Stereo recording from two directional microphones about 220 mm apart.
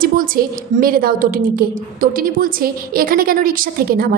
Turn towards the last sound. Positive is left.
turn(degrees=-40)  # may be behind; listen again after turning